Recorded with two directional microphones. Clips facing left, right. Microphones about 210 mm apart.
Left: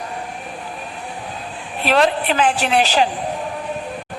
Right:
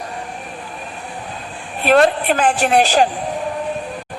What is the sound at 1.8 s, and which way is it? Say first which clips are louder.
A woman's voice: right 3 dB; 50° right (ahead or behind).